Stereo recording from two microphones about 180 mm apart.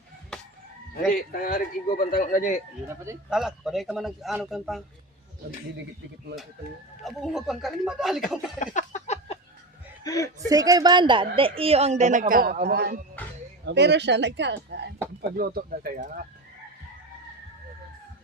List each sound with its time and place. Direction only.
1.0 s a man's voice: 55° left (ahead or behind)
3.2 s speech: 5° right (ahead or behind)
7.0 s speech: centre (ahead or behind)
8.5 s a sound: 45° left (ahead or behind)
10.0 s speech: 20° left (ahead or behind)
10.5 s a woman's voice: 20° right (ahead or behind); by 13.0 s 60° right (ahead or behind)
13.7 s speech: 70° right (ahead or behind)
15.4 s a woman's voice: 55° right (ahead or behind)